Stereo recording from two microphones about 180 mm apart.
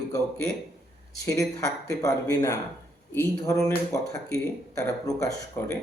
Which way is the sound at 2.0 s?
20° left (ahead or behind).